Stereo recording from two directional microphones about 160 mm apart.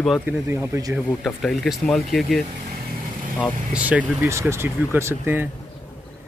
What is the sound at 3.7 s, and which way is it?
Speech, 10° right (ahead or behind).